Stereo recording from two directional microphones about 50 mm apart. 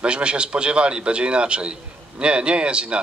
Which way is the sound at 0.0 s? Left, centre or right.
Right.